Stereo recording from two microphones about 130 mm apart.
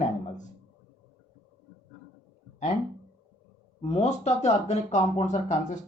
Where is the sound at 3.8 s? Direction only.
60° left (ahead or behind).